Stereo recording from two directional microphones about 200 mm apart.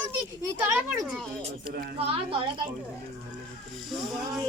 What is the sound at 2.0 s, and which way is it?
Speech, 30° right (ahead or behind).